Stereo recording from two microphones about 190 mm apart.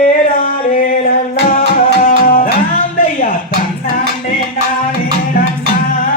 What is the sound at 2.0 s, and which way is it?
Music, 50° left (ahead or behind).